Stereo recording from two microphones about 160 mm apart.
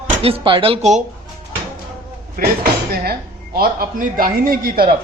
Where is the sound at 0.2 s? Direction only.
35° right (ahead or behind).